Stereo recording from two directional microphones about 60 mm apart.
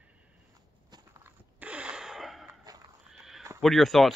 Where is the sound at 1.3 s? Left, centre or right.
Right; by 3.4 s centre.